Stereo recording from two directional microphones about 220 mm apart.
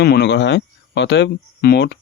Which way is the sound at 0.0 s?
50° left (ahead or behind).